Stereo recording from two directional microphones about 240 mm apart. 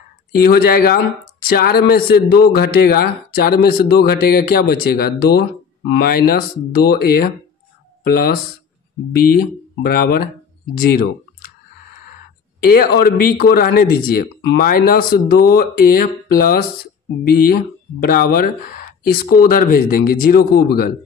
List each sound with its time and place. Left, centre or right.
0.4 s a man's voice: left
9.8 s speech: left
12.5 s a man's voice: left